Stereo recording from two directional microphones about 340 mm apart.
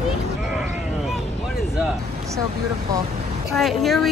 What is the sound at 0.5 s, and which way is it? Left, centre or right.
Sheep, centre.